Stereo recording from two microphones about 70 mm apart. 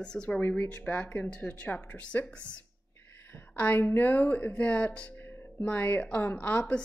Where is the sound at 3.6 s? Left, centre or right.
Left.